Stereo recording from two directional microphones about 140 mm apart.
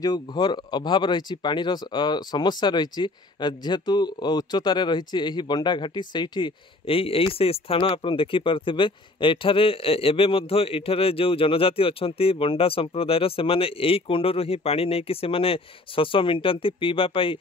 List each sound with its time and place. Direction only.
0.0 s speech: 30° left (ahead or behind)